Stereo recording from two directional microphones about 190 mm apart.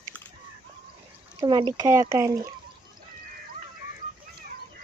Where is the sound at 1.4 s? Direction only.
25° right (ahead or behind).